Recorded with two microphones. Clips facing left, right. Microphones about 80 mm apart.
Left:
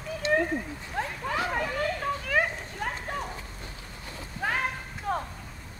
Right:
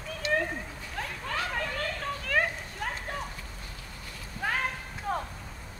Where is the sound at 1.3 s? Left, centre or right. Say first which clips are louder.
Left 3 dB; centre.